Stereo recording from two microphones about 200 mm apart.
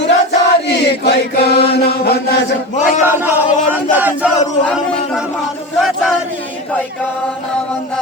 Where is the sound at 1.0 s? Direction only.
55° left (ahead or behind).